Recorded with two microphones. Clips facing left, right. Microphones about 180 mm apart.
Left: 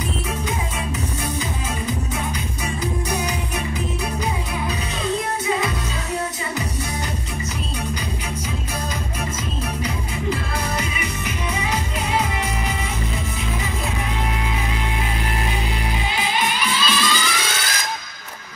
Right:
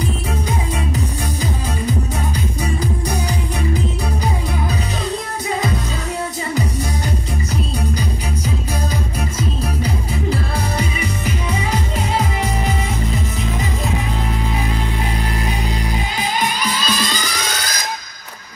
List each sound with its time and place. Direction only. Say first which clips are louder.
9.8 s music: right 2 dB; 35° right (ahead or behind)
15.9 s music: right 2 dB; 40° right (ahead or behind)